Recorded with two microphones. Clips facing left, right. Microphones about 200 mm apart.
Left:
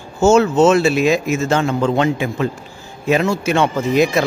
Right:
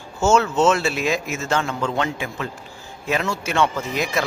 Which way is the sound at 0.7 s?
15° left (ahead or behind).